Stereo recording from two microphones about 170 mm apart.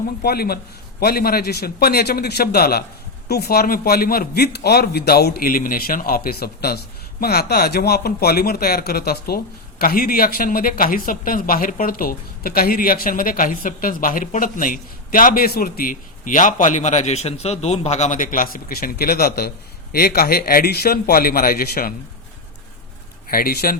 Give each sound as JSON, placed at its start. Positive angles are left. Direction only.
{"t": 0.2, "sound": "a man's voice", "side_deg": 65}
{"t": 23.3, "sound": "a man's voice", "side_deg": 60}